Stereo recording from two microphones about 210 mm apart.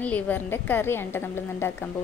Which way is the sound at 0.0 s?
5° left (ahead or behind).